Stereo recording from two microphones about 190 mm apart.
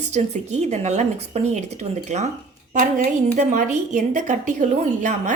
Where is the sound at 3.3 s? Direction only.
40° right (ahead or behind).